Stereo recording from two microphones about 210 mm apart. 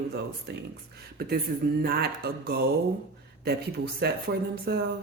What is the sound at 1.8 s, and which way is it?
Speech, 45° right (ahead or behind).